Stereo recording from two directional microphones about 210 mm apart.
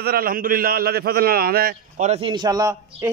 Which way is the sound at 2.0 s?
25° right (ahead or behind).